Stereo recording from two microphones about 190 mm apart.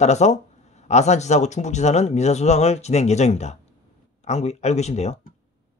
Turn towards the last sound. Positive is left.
turn(degrees=35)  # may be behind; listen again after turning